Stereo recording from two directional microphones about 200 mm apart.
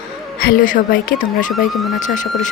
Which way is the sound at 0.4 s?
40° left (ahead or behind).